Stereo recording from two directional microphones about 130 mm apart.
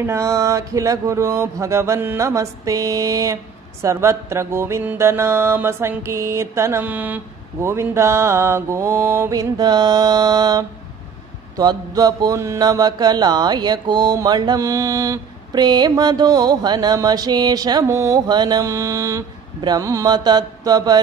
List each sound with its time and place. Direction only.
0.0 s mantra: 20° right (ahead or behind)